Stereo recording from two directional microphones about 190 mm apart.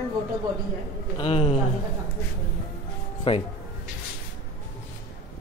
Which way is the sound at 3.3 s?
30° left (ahead or behind).